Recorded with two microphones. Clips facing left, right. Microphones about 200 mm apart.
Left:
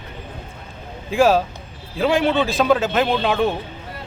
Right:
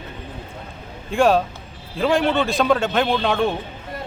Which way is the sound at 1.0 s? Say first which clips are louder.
Left 1 dB; centre (ahead or behind).